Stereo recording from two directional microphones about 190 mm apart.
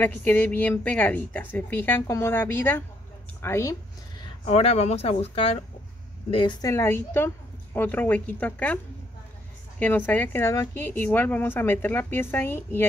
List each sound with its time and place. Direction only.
0.0 s a woman's voice: 10° left (ahead or behind)
4.5 s a woman's voice: 35° left (ahead or behind)
6.7 s a woman's voice: 15° left (ahead or behind)
9.8 s a woman's voice: 10° left (ahead or behind)